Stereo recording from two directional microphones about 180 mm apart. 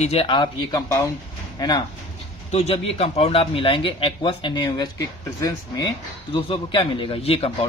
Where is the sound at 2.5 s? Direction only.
35° left (ahead or behind).